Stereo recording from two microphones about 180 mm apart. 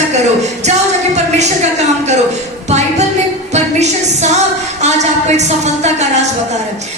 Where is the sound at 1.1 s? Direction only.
40° right (ahead or behind).